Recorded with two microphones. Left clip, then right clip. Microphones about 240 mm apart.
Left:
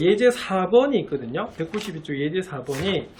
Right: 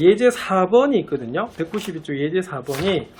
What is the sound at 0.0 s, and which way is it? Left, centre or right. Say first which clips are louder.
Speech: right 3 dB; centre.